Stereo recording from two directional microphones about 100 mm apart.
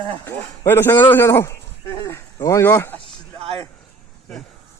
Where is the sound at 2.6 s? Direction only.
20° left (ahead or behind).